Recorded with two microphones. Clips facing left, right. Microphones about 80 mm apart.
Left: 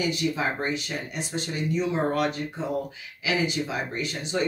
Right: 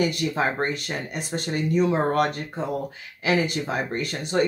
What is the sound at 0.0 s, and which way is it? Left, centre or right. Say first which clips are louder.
Speech: right 3 dB; right.